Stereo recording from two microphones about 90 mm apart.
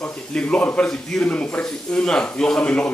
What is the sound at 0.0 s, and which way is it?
Speech, 15° left (ahead or behind).